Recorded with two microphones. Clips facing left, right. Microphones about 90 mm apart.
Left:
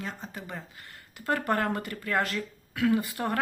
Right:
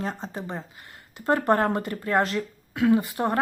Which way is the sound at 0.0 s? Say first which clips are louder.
Right 7 dB; 30° right (ahead or behind).